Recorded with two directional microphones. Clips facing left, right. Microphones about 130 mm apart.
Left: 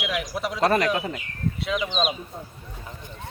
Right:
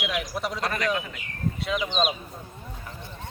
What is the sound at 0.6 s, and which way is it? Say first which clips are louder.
Speech: left 8 dB; 35° left (ahead or behind).